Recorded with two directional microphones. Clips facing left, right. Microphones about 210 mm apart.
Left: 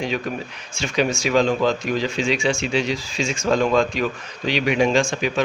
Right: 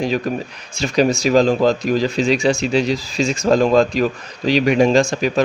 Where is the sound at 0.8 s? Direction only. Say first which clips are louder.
Right 5 dB; 35° right (ahead or behind).